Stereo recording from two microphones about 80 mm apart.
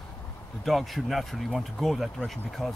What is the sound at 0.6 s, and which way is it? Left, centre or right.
Speech, centre.